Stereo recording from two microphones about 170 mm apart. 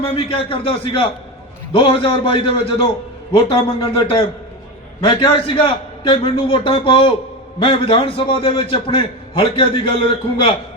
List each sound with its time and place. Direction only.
0.1 s a man's voice: 35° left (ahead or behind)